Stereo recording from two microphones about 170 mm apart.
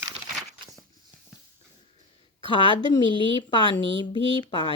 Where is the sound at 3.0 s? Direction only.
30° right (ahead or behind).